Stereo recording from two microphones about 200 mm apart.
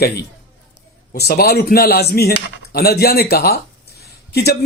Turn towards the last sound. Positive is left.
turn(degrees=55)  # may be behind; listen again after turning